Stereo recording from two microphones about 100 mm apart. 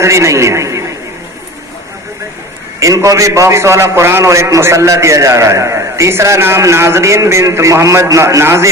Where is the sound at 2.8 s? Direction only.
30° right (ahead or behind).